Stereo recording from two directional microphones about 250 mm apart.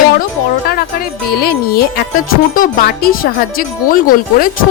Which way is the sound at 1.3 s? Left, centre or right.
Left.